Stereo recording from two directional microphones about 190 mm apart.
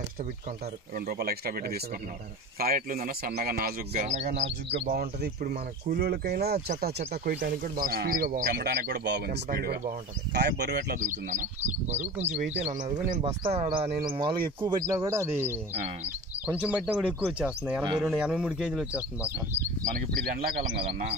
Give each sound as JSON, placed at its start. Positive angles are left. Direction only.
{"t": 0.9, "sound": "speech", "side_deg": -55}
{"t": 4.6, "sound": "speech", "side_deg": -55}
{"t": 11.0, "sound": "speech", "side_deg": -40}
{"t": 13.8, "sound": "speech", "side_deg": -50}
{"t": 14.1, "sound": "speech", "side_deg": -25}
{"t": 16.4, "sound": "speech", "side_deg": -5}
{"t": 20.2, "sound": "speech", "side_deg": -50}
{"t": 20.8, "sound": "speech", "side_deg": -35}